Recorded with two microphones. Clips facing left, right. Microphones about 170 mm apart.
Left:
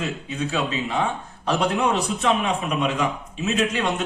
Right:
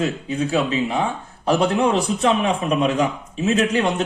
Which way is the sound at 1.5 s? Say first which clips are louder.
Right 4 dB; 30° right (ahead or behind).